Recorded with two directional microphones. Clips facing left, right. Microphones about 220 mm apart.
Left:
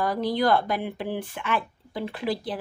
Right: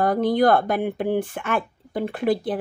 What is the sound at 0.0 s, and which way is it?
A woman's voice, 50° right (ahead or behind).